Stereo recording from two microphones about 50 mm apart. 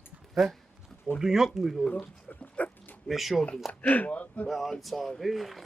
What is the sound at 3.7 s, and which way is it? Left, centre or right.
Speech, left.